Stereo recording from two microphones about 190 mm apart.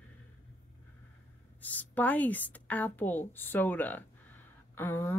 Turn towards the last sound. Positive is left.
turn(degrees=10)  # may be behind; listen again after turning